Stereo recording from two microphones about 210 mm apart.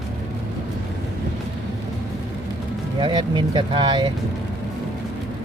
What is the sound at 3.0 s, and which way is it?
Speech, 20° right (ahead or behind).